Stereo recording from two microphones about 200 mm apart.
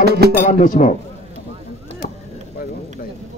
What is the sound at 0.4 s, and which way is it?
Speech, 40° left (ahead or behind).